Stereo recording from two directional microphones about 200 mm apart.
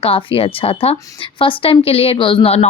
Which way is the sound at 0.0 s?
25° left (ahead or behind).